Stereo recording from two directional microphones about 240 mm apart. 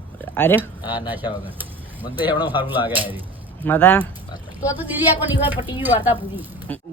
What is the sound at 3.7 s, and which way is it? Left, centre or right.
Speech, centre.